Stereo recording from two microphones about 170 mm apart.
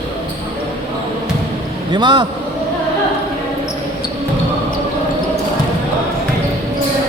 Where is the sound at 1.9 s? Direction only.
25° right (ahead or behind).